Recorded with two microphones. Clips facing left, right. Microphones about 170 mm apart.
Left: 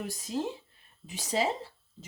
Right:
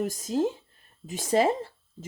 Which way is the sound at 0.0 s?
45° right (ahead or behind).